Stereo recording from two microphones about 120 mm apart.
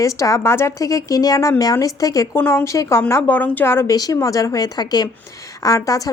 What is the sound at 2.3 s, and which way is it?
Speech, 20° left (ahead or behind).